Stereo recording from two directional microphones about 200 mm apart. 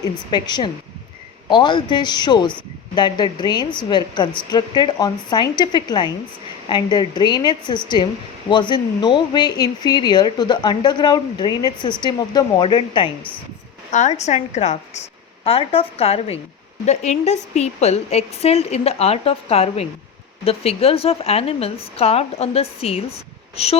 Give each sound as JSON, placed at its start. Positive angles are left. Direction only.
{"t": 0.0, "sound": "speech", "side_deg": 20}
{"t": 13.9, "sound": "a woman's voice", "side_deg": 35}